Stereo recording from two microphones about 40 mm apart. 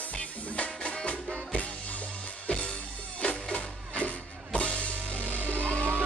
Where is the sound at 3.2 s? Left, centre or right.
Left.